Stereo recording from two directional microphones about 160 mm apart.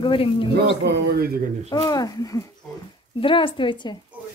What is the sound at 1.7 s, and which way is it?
Speech, 25° left (ahead or behind).